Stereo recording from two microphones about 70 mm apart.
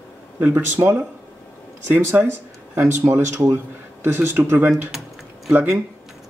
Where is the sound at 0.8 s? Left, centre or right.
Right.